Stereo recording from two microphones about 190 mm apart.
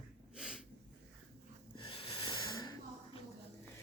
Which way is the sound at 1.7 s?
30° left (ahead or behind).